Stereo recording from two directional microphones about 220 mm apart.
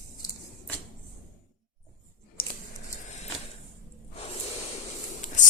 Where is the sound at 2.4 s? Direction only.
40° left (ahead or behind).